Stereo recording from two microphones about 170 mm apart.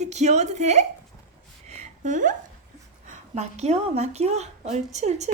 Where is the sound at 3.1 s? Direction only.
40° right (ahead or behind).